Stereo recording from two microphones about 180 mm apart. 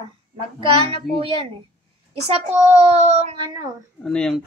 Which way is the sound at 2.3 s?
35° right (ahead or behind).